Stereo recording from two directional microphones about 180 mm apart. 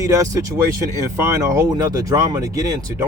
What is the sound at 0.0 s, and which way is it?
Speech, 15° right (ahead or behind).